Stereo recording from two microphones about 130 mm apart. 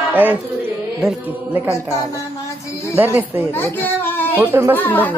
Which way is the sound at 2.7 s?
20° left (ahead or behind).